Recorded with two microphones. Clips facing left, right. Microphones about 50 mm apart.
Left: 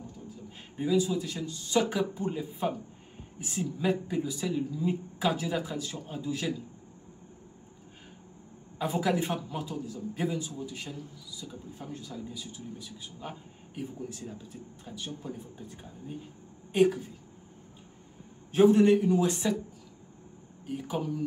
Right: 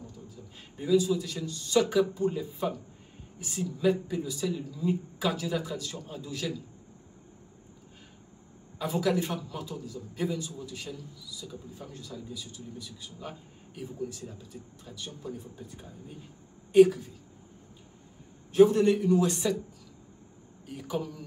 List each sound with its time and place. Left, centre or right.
0.7 s a man's voice: left
8.7 s a man's voice: centre
18.5 s a man's voice: left
20.6 s a man's voice: centre